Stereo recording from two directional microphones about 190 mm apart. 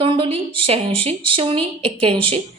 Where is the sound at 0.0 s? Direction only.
25° right (ahead or behind).